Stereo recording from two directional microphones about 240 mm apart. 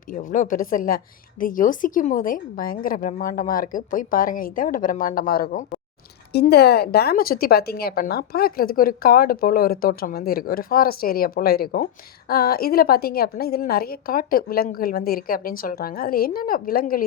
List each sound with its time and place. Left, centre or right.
0.1 s a woman's voice: left